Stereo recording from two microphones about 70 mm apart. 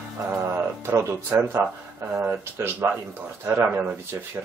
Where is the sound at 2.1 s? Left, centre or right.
Right.